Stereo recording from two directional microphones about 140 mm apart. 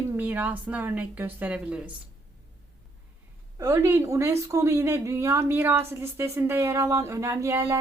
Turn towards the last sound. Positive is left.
turn(degrees=-20)  # may be behind; listen again after turning